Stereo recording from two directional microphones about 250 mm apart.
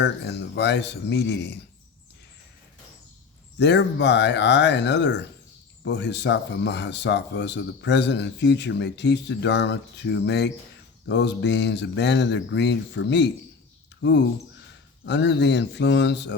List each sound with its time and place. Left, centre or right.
0.0 s speech: left
3.6 s speech: left